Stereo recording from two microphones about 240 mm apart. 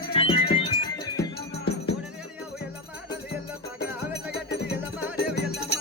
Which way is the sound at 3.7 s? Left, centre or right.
Left.